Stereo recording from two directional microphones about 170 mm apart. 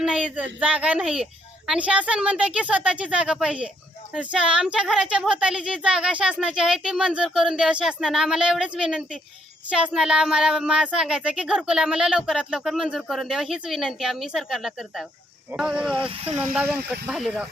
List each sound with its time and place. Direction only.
0.0 s speech: 5° right (ahead or behind)
16.0 s speech: 35° right (ahead or behind)
16.5 s speech: 5° right (ahead or behind)